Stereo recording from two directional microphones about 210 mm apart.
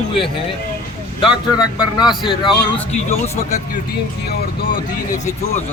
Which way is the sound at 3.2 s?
30° left (ahead or behind).